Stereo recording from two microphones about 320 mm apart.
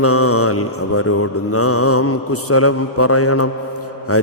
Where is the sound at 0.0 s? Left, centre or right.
Left.